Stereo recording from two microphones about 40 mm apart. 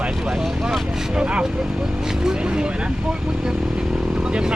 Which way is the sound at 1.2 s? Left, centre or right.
Right.